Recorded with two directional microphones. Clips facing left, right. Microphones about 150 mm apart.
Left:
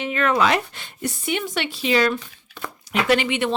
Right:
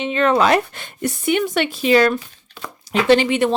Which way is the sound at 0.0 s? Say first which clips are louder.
Right 4 dB; 25° right (ahead or behind).